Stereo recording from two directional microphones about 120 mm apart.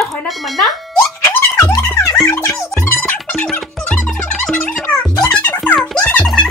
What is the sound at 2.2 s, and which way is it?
Music, 25° left (ahead or behind).